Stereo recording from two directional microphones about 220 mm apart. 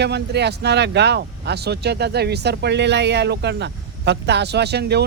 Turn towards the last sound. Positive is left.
turn(degrees=-50)  # may be behind; listen again after turning